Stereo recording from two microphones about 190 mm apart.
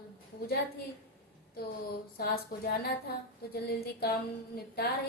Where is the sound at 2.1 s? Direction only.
55° left (ahead or behind).